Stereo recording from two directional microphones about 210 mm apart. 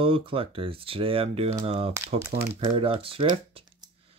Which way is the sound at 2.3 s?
55° right (ahead or behind).